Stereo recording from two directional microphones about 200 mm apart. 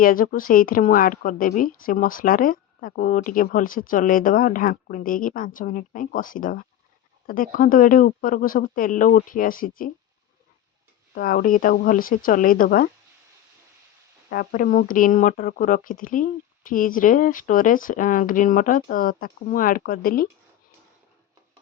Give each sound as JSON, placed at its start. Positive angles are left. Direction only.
{"t": 0.0, "sound": "speech", "side_deg": 45}
{"t": 11.1, "sound": "speech", "side_deg": 45}
{"t": 14.3, "sound": "speech", "side_deg": 45}